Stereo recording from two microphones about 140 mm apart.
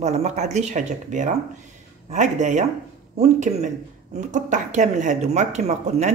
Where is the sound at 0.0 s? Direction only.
50° right (ahead or behind).